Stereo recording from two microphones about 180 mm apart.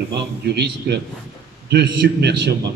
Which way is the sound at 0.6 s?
65° right (ahead or behind).